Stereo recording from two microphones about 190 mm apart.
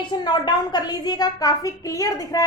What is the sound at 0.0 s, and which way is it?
A woman's voice, 25° left (ahead or behind).